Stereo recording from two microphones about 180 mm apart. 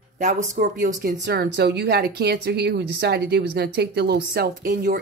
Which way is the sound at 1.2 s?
60° right (ahead or behind).